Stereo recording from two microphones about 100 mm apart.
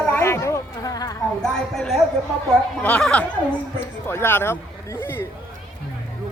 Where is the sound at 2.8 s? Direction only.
15° left (ahead or behind).